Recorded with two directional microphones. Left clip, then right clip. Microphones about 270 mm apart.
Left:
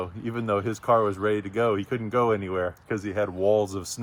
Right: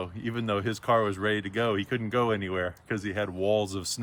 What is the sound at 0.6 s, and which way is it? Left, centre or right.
Speech, centre.